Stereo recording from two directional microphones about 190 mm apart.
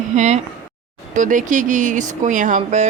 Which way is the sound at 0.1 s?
40° right (ahead or behind).